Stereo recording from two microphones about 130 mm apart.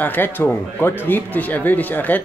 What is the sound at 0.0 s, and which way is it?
Speech, 15° left (ahead or behind).